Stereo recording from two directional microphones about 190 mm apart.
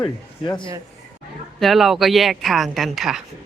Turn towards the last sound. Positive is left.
turn(degrees=0)  # may be behind; listen again after turning